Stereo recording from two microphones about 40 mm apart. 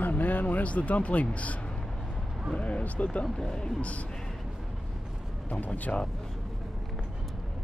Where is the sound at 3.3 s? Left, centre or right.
Centre.